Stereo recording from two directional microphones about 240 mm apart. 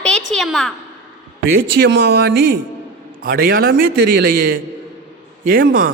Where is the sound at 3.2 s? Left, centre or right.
Right.